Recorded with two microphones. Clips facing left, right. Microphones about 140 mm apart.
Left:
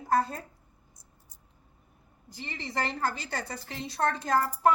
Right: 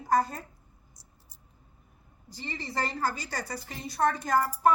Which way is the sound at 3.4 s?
25° left (ahead or behind).